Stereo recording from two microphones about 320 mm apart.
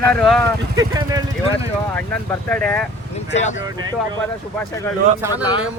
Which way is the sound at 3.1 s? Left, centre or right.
Left.